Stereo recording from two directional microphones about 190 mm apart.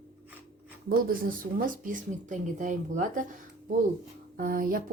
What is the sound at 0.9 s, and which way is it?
A woman's voice, 50° right (ahead or behind).